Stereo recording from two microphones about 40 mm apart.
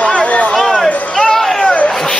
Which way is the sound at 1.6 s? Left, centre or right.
Left.